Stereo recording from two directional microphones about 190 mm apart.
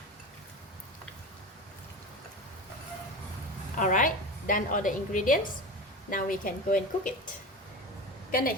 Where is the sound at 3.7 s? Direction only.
45° left (ahead or behind).